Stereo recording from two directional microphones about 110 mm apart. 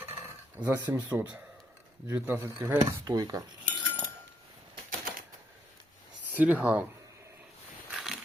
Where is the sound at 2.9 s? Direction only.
35° right (ahead or behind).